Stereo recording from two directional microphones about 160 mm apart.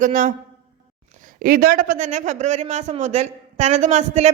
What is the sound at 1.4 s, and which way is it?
A man's voice, 65° right (ahead or behind).